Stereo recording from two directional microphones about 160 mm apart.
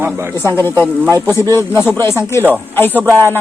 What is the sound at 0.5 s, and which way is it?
A woman's voice, 15° left (ahead or behind).